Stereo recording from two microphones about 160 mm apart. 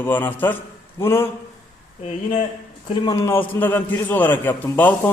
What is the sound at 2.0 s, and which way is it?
Speech, 45° left (ahead or behind).